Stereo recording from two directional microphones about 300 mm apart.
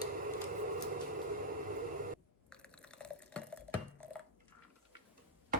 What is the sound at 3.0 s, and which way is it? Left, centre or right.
Water, centre.